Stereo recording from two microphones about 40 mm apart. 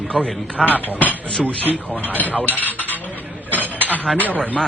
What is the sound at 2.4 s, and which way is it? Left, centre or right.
Speech, left.